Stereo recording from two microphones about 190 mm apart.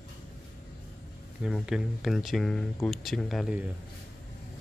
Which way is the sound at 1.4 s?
Centre (ahead or behind).